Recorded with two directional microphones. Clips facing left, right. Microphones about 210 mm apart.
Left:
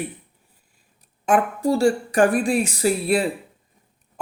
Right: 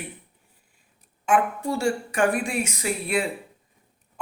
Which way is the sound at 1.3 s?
35° left (ahead or behind).